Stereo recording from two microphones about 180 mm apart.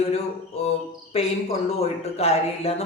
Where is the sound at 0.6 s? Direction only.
35° left (ahead or behind).